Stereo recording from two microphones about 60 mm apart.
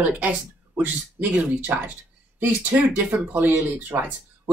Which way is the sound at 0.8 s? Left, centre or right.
Right.